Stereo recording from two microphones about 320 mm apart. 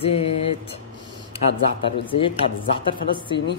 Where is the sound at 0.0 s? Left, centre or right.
Centre.